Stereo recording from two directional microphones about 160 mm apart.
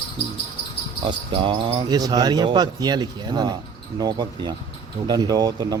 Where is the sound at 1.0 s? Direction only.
30° right (ahead or behind).